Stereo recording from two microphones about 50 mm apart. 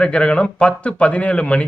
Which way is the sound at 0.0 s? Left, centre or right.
Centre.